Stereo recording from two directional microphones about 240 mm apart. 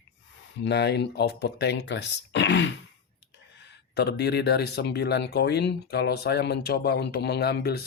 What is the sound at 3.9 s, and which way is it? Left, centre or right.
Speech, left.